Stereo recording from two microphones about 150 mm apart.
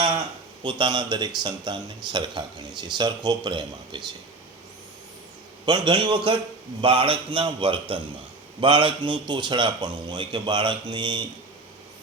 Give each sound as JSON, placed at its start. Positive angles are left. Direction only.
{"t": 0.6, "sound": "speech", "side_deg": -30}
{"t": 5.6, "sound": "speech", "side_deg": -30}